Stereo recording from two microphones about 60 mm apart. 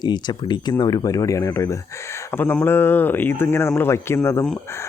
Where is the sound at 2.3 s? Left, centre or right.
Left.